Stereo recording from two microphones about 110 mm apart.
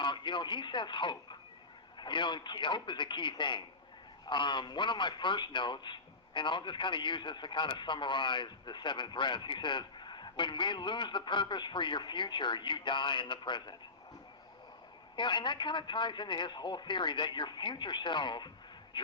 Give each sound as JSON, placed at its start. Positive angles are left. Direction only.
{"t": 0.0, "sound": "a man's voice", "side_deg": 45}
{"t": 15.1, "sound": "a man's voice", "side_deg": 45}